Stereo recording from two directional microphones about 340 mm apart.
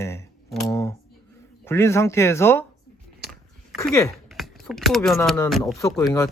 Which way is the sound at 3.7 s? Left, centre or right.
Centre.